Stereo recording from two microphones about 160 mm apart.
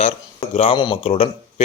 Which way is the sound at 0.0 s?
40° left (ahead or behind).